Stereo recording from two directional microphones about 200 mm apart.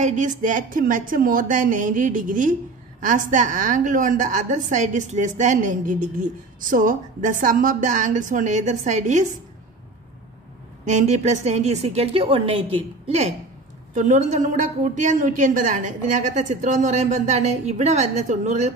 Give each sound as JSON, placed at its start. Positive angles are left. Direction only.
{"t": 0.0, "sound": "a woman's voice", "side_deg": -40}
{"t": 10.9, "sound": "a woman's voice", "side_deg": -35}